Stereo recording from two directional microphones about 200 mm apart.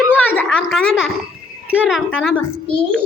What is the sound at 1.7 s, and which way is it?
Speech, 5° right (ahead or behind).